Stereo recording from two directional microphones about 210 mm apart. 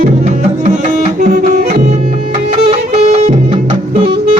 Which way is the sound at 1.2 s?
45° right (ahead or behind).